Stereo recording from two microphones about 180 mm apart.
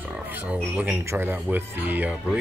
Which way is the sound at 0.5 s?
5° right (ahead or behind).